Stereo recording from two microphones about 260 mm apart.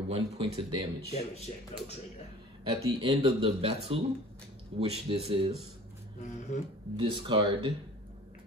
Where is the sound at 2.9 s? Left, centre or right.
Right.